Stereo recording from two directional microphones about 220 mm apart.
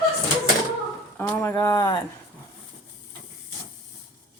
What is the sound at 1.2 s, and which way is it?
Speech, 10° left (ahead or behind).